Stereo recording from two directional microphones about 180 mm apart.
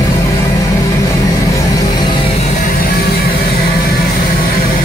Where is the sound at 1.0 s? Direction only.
20° left (ahead or behind).